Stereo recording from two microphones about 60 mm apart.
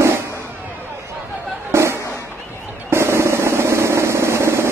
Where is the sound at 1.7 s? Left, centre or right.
Right.